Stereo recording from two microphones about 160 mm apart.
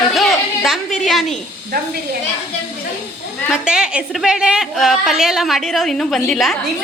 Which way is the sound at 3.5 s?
5° right (ahead or behind).